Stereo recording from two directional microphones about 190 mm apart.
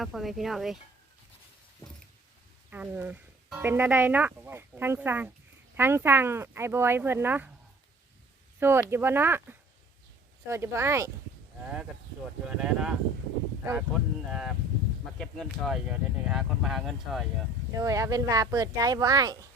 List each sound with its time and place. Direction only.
0.0 s speech: centre (ahead or behind)
2.6 s speech: 10° right (ahead or behind)
8.5 s speech: 10° right (ahead or behind)
17.7 s speech: 15° right (ahead or behind)